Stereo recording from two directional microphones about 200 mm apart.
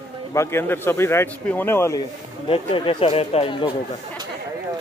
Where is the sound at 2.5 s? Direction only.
25° left (ahead or behind).